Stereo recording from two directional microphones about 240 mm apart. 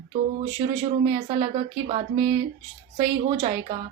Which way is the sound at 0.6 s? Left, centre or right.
Right.